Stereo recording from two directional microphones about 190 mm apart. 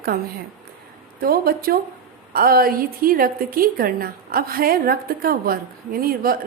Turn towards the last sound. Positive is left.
turn(degrees=-50)  # may be behind; listen again after turning